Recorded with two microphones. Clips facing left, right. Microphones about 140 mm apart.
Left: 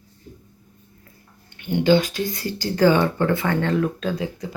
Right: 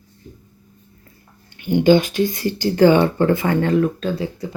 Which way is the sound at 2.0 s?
35° left (ahead or behind).